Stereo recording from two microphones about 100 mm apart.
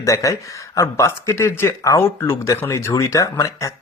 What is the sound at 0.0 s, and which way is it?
Speech, 35° left (ahead or behind).